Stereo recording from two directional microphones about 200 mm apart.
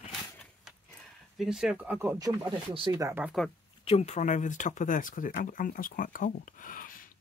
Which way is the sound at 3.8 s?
30° left (ahead or behind).